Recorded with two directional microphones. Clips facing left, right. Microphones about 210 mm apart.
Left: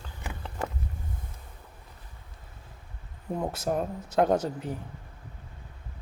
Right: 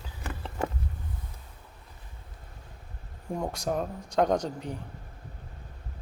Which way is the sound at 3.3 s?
5° left (ahead or behind).